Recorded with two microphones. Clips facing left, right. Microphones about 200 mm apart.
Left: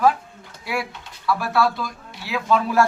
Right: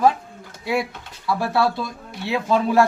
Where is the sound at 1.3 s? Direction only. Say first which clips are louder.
Even; 25° right (ahead or behind).